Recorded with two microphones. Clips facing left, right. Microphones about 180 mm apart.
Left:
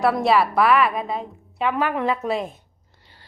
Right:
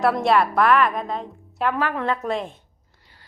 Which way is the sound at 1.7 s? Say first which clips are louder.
Left 4 dB; 15° left (ahead or behind).